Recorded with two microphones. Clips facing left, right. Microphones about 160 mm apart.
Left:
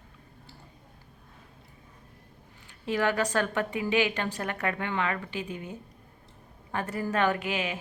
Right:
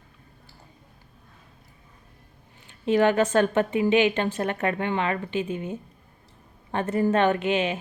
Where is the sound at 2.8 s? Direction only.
20° right (ahead or behind).